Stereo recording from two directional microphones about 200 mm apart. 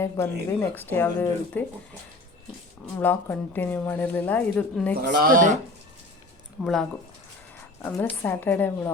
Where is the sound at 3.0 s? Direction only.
10° left (ahead or behind).